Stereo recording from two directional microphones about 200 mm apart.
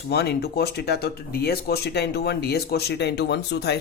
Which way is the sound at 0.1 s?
55° left (ahead or behind).